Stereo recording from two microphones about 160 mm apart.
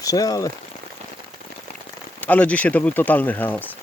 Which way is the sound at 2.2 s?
10° left (ahead or behind).